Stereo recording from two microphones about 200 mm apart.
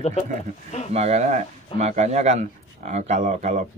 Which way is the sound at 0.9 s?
35° right (ahead or behind).